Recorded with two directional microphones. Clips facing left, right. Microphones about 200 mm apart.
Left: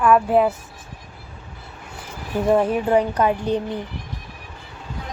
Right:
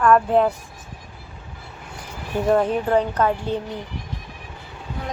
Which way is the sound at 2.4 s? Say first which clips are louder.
Left 1 dB; 10° left (ahead or behind).